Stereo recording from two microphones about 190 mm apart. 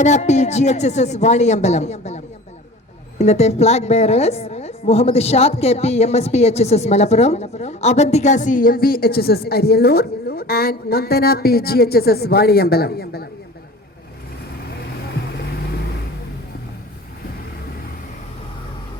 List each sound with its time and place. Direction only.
0.0 s a woman's voice: 35° left (ahead or behind); by 13.2 s 55° left (ahead or behind)